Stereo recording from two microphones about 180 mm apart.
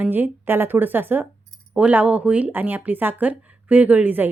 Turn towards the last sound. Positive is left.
turn(degrees=-10)  # may be behind; listen again after turning